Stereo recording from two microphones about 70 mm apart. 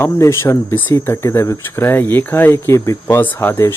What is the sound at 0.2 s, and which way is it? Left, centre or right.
Speech, left.